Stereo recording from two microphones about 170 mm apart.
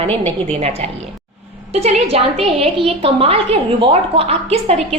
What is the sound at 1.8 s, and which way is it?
A woman's voice, 35° right (ahead or behind).